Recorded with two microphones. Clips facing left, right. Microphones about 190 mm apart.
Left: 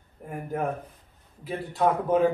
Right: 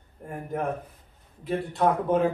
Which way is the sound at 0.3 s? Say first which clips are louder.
Even; centre (ahead or behind).